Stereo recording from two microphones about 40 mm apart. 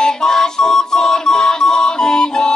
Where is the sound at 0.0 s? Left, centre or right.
Centre.